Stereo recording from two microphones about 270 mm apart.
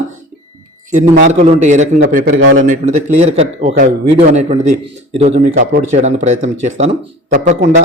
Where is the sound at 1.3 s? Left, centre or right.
Right.